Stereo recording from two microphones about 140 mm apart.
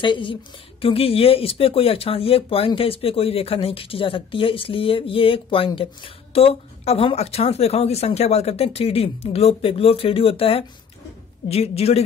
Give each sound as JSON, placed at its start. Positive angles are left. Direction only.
{"t": 0.0, "sound": "speech", "side_deg": 35}